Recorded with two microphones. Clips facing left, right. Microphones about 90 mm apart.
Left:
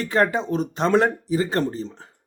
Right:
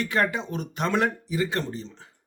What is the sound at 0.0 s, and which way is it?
A man's voice, 35° left (ahead or behind).